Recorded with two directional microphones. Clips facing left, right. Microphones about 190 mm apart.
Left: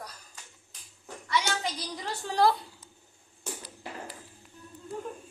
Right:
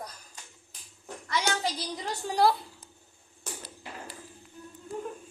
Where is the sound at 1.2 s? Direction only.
45° right (ahead or behind).